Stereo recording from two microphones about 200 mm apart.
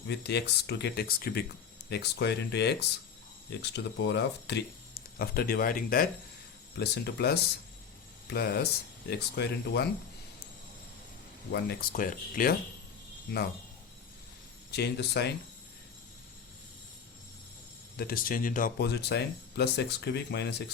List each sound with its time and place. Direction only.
0.1 s speech: 55° left (ahead or behind)
11.5 s speech: 50° left (ahead or behind)
14.7 s speech: 55° left (ahead or behind)
17.9 s speech: 50° left (ahead or behind)